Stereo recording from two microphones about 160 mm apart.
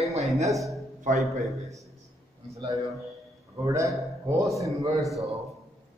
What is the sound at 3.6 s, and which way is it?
Speech, 20° right (ahead or behind).